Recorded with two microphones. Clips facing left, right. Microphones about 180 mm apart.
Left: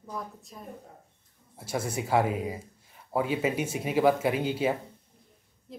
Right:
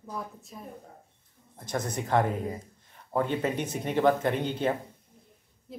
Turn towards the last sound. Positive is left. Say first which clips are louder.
# right 1 dB
turn(degrees=0)  # may be behind; listen again after turning